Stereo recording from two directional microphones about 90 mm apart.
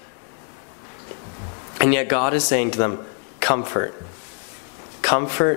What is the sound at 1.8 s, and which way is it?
A man's voice, 15° left (ahead or behind).